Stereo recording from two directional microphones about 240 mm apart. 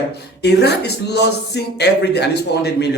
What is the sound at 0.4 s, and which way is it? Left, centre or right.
Speech, left.